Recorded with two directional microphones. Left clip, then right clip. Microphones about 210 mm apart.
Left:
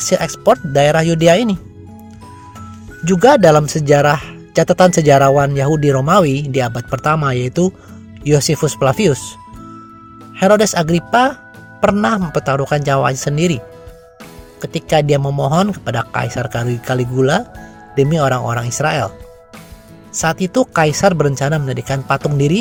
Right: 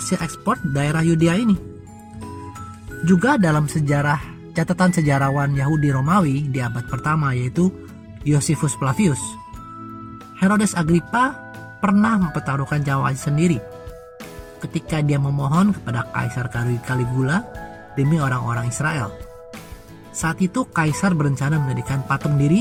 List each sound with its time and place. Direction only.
0.1 s speech: 40° left (ahead or behind)
3.1 s speech: 35° left (ahead or behind)
10.3 s speech: 35° left (ahead or behind)
14.6 s speech: 35° left (ahead or behind)
20.2 s speech: 35° left (ahead or behind)